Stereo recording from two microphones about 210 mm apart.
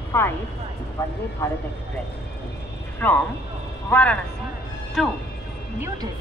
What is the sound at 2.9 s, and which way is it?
A man's voice, 10° left (ahead or behind).